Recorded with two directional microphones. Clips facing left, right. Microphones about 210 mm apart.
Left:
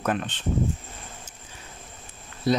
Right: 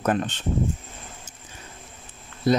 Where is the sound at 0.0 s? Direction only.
45° right (ahead or behind).